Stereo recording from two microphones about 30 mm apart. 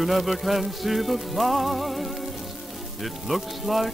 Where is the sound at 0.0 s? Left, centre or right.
Centre.